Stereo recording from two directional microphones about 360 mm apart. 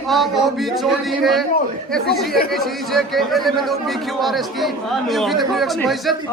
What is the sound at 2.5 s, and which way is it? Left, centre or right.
A man's voice, centre.